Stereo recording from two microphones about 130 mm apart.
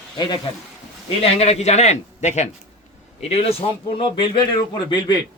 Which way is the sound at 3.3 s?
50° left (ahead or behind).